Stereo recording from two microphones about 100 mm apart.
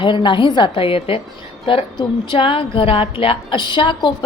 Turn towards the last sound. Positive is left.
turn(degrees=50)  # may be behind; listen again after turning